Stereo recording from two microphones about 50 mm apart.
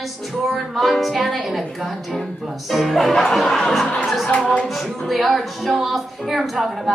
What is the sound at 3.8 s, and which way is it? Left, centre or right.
Speech, centre.